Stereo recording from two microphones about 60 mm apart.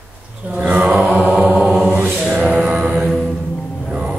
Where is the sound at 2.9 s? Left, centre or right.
Centre.